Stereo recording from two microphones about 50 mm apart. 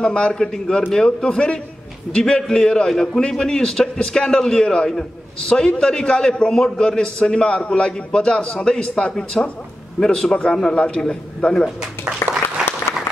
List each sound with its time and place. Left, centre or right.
0.0 s a man's voice: centre
12.2 s applause: left